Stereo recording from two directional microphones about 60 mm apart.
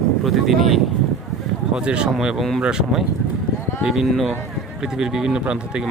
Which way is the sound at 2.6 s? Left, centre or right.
Centre.